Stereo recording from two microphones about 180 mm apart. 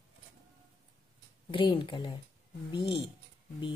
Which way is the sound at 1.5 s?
30° left (ahead or behind).